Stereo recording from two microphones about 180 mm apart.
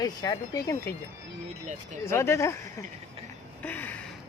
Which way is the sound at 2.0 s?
15° left (ahead or behind).